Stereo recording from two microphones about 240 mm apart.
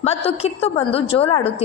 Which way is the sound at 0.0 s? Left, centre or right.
Left.